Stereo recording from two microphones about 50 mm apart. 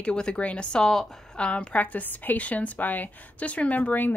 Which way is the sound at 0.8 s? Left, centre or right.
Centre.